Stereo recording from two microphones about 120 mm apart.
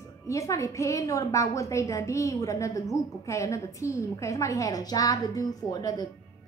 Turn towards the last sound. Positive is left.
turn(degrees=30)  # may be behind; listen again after turning